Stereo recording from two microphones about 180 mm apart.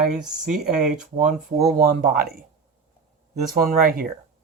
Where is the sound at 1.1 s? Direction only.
45° right (ahead or behind).